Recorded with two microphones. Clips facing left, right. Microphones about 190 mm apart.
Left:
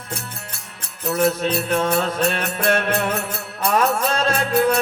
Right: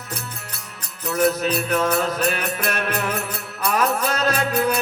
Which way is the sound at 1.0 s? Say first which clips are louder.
Left 1 dB; 30° left (ahead or behind).